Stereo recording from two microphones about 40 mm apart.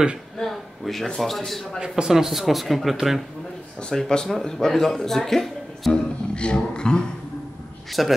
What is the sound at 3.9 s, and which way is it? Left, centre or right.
A man's voice, centre.